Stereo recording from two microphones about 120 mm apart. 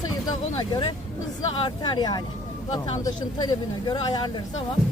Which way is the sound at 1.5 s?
40° left (ahead or behind).